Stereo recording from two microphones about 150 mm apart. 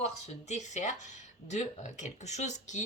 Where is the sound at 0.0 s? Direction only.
50° left (ahead or behind).